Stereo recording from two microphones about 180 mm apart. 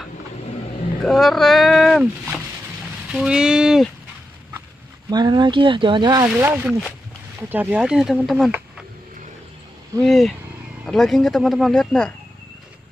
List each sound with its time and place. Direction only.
1.0 s speech: centre (ahead or behind)
5.1 s speech: 25° right (ahead or behind)
6.2 s speech: 10° right (ahead or behind)
10.0 s speech: centre (ahead or behind)